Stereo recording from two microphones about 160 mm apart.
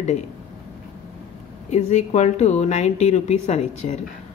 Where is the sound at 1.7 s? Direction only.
45° left (ahead or behind).